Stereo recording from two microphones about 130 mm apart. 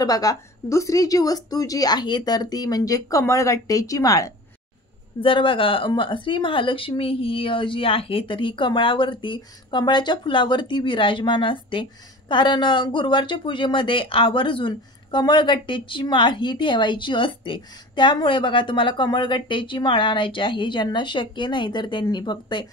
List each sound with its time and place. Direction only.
0.0 s a woman's voice: 25° left (ahead or behind)
5.2 s a woman's voice: 40° left (ahead or behind)